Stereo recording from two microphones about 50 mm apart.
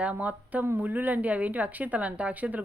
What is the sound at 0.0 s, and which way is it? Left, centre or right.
A woman's voice, right.